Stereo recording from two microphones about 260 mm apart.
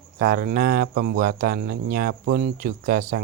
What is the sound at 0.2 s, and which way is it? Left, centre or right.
Speech, right.